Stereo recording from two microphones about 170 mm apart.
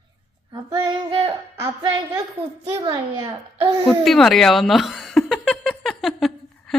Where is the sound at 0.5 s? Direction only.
25° right (ahead or behind).